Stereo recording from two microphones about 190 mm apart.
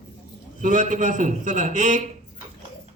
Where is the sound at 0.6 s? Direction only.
40° right (ahead or behind).